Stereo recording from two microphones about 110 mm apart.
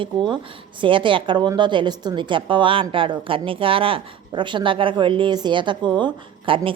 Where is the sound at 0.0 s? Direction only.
50° right (ahead or behind).